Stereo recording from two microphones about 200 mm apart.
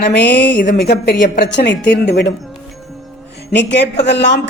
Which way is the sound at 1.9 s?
60° left (ahead or behind).